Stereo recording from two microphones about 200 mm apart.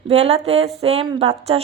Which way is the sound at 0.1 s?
30° right (ahead or behind).